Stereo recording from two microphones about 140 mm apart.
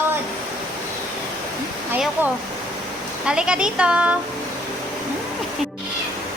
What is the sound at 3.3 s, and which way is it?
Speech, 5° right (ahead or behind).